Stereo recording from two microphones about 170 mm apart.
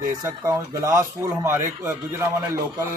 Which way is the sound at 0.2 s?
20° right (ahead or behind).